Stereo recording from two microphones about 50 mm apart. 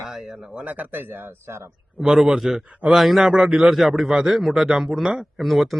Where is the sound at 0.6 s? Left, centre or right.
Right.